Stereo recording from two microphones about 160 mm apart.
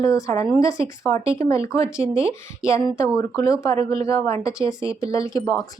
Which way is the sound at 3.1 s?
20° left (ahead or behind).